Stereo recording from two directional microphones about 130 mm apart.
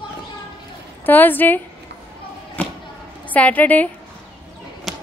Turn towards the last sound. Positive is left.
turn(degrees=0)  # may be behind; listen again after turning